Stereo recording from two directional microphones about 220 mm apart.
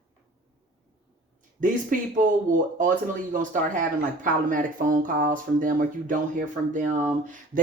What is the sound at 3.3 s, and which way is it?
Speech, 35° right (ahead or behind).